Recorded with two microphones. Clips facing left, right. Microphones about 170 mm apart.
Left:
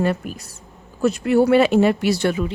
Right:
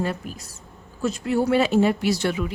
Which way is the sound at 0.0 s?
60° left (ahead or behind).